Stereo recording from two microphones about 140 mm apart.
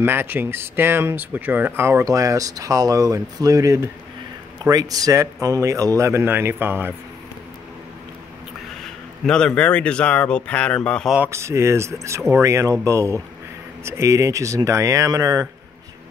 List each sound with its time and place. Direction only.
0.0 s speech: 15° right (ahead or behind)
8.8 s speech: 5° left (ahead or behind)
11.2 s speech: 20° right (ahead or behind)